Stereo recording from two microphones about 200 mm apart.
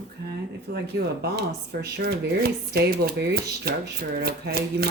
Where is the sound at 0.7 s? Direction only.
55° right (ahead or behind).